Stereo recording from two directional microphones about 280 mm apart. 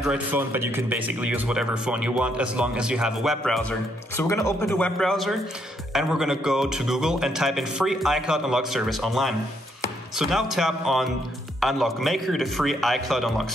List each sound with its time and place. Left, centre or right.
0.0 s a man's voice: centre
4.2 s a man's voice: centre